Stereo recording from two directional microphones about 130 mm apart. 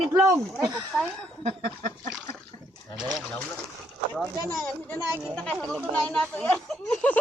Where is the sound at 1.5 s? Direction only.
85° right.